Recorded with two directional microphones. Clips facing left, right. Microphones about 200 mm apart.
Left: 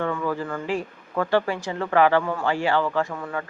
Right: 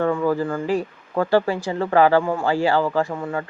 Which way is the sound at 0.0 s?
35° right (ahead or behind).